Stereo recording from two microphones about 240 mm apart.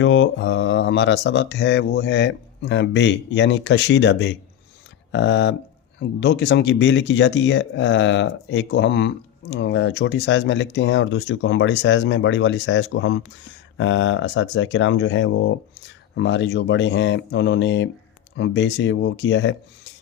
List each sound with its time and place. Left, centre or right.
0.0 s speech: left